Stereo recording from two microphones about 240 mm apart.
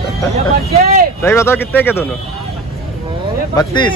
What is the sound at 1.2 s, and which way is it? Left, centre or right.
Speech, centre.